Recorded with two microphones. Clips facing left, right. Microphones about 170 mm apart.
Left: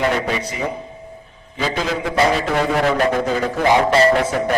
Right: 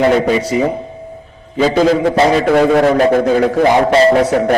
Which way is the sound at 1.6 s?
40° right (ahead or behind).